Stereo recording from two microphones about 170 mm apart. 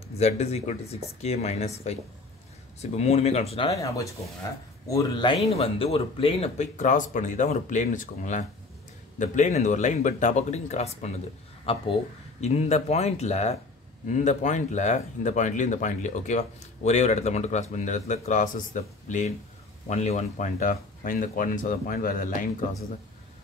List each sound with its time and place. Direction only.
0.2 s speech: 40° left (ahead or behind)
3.7 s speech: 20° left (ahead or behind); by 22.5 s 50° left (ahead or behind)